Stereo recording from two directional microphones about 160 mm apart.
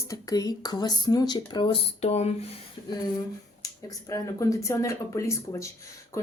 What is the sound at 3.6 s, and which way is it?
Speech, 20° left (ahead or behind).